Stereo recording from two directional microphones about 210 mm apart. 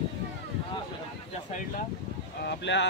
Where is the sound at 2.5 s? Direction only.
60° left (ahead or behind).